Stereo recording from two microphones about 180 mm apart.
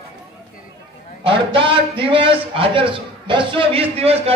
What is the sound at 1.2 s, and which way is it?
A man's voice, 30° right (ahead or behind).